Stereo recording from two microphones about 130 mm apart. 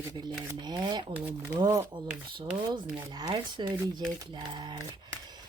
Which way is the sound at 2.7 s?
30° right (ahead or behind).